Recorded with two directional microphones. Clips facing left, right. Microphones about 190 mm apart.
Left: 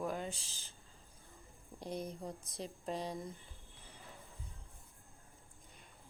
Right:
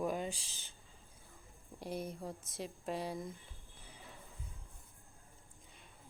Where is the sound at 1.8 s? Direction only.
5° right (ahead or behind).